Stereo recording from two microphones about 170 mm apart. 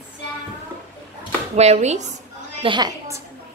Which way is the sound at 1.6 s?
40° right (ahead or behind).